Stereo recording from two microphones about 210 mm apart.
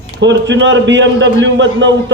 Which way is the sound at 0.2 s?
60° right (ahead or behind).